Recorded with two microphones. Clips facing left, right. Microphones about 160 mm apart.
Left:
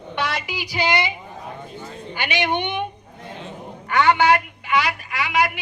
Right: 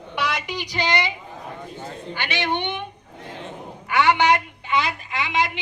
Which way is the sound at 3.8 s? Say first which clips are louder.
Left 1 dB; 10° right (ahead or behind).